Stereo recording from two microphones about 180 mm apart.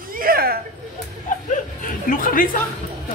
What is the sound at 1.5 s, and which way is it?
Speech, 50° left (ahead or behind).